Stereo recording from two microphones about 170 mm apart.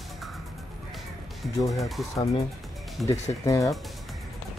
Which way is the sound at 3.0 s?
20° left (ahead or behind).